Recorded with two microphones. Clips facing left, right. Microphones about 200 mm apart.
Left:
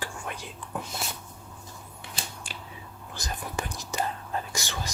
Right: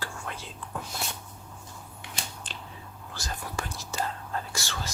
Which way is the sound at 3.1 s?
20° left (ahead or behind).